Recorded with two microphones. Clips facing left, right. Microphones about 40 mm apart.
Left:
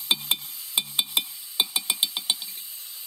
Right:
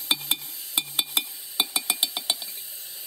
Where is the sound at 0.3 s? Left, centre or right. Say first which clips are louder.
Left 1 dB; left.